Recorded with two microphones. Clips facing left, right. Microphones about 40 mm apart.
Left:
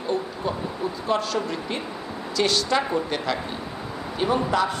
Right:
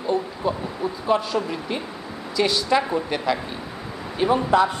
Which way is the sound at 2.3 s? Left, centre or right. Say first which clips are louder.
Right 2 dB; centre.